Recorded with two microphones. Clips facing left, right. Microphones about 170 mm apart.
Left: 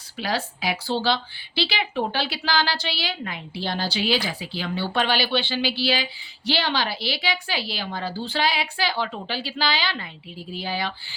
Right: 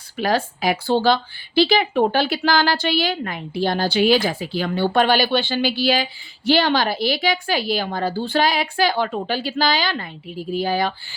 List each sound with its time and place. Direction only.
0.2 s speech: 50° right (ahead or behind)